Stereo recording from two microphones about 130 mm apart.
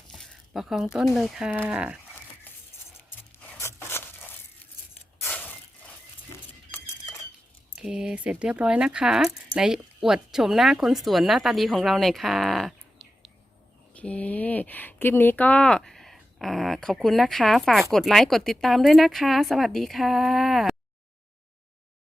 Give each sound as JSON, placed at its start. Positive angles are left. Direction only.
{"t": 0.1, "sound": "a sound", "side_deg": 0}
{"t": 0.9, "sound": "speech", "side_deg": 0}
{"t": 1.5, "sound": "speech", "side_deg": -15}
{"t": 3.0, "sound": "a sound", "side_deg": 15}
{"t": 5.2, "sound": "mechanisms", "side_deg": 15}
{"t": 7.8, "sound": "speech", "side_deg": -5}